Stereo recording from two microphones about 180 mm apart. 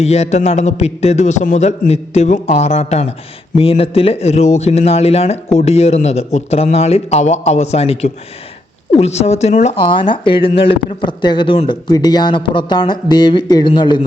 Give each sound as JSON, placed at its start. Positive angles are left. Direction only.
{"t": 0.0, "sound": "a man's voice", "side_deg": 35}